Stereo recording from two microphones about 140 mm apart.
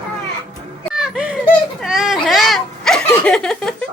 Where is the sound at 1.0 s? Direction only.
5° right (ahead or behind).